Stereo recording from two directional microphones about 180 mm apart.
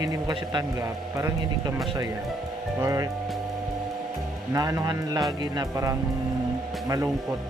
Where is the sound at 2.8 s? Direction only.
15° right (ahead or behind).